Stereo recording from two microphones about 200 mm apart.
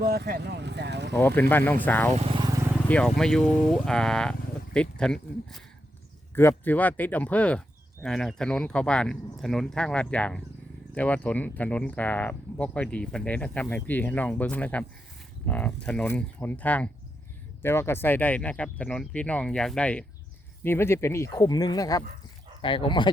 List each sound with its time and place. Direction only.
0.0 s speech: 50° right (ahead or behind)
1.4 s speech: 10° left (ahead or behind)
2.1 s vehicle: 25° right (ahead or behind)
2.9 s speech: 5° left (ahead or behind); by 23.0 s 25° left (ahead or behind)